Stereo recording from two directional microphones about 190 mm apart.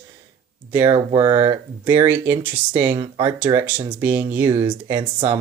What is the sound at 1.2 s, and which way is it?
Speech, 15° right (ahead or behind).